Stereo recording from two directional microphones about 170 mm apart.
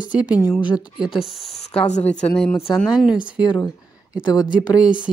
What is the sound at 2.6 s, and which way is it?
Speech, centre (ahead or behind).